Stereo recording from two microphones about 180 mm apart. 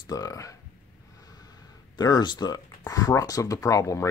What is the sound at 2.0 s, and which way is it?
Speech, 20° left (ahead or behind).